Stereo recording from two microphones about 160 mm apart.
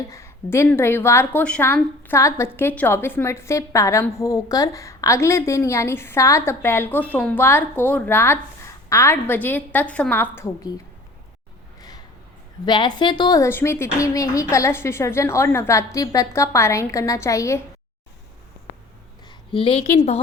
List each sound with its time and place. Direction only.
0.1 s a woman's voice: 20° left (ahead or behind)
10.3 s speech: 20° left (ahead or behind)
11.8 s a sound: 25° left (ahead or behind)
12.6 s speech: 30° left (ahead or behind)
19.3 s a sound: 30° left (ahead or behind)
19.9 s a woman's voice: 45° left (ahead or behind)